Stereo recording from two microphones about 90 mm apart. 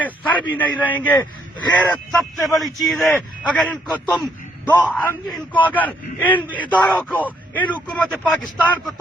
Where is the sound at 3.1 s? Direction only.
15° left (ahead or behind).